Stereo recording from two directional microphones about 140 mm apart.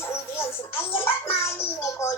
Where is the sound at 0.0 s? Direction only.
20° left (ahead or behind).